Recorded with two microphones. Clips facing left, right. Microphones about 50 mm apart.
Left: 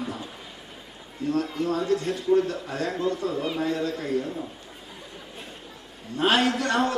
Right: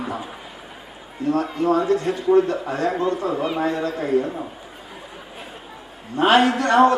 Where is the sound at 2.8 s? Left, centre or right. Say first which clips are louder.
Right 4 dB; centre.